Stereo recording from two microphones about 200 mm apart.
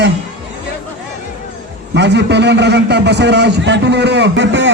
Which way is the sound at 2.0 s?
60° right (ahead or behind).